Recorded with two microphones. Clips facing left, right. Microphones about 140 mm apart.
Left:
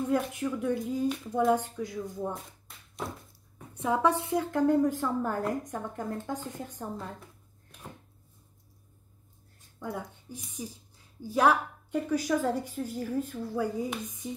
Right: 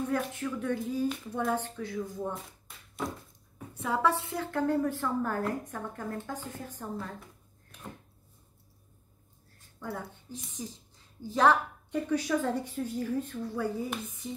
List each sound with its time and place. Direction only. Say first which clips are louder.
0.1 s a woman's voice: left 3 dB; 15° left (ahead or behind)
1.0 s speech: left 4 dB; centre (ahead or behind)
1.5 s a woman's voice: left 5 dB; 15° left (ahead or behind)
3.7 s a woman's voice: left 2 dB; 20° left (ahead or behind)
9.8 s a woman's voice: left 2 dB; 15° left (ahead or behind)